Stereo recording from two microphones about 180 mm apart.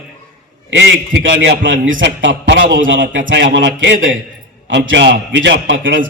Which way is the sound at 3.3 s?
75° right (ahead or behind).